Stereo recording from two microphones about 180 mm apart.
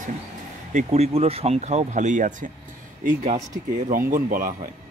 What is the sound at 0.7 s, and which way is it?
Speech, 35° right (ahead or behind).